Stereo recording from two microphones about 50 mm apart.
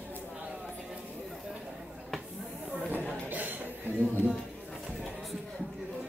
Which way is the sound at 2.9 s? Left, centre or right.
Right.